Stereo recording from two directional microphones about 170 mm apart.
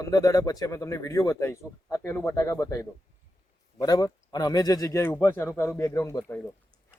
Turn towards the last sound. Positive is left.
turn(degrees=20)  # may be behind; listen again after turning